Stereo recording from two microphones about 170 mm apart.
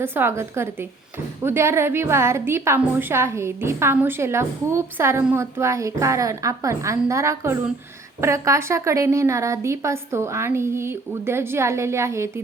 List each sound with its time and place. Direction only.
0.0 s a woman's voice: 10° right (ahead or behind)